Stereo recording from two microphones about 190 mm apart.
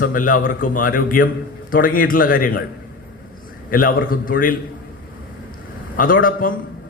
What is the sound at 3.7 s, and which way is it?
Speech, 50° left (ahead or behind).